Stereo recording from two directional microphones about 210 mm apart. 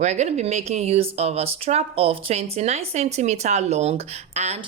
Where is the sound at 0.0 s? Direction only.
35° right (ahead or behind).